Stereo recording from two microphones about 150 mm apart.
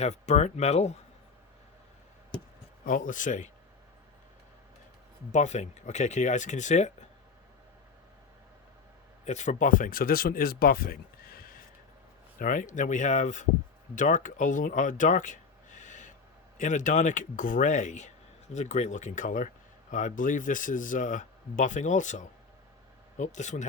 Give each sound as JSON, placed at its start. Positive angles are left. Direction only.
{"t": 0.0, "sound": "speech", "side_deg": 50}
{"t": 2.8, "sound": "speech", "side_deg": 60}
{"t": 5.3, "sound": "speech", "side_deg": 50}
{"t": 9.2, "sound": "speech", "side_deg": 50}